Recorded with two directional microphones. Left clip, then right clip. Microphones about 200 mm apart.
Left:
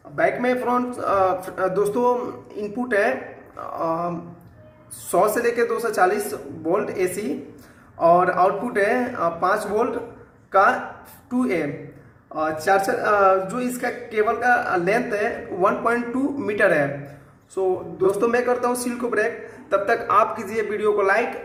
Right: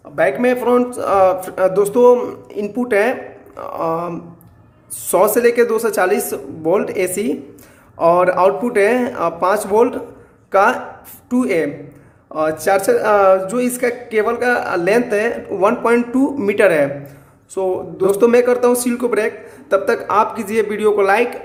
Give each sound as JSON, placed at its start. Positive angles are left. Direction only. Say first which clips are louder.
{"t": 0.2, "sound": "speech", "louder": "right 5 dB", "side_deg": -50}
{"t": 5.1, "sound": "speech", "louder": "right 7 dB", "side_deg": -50}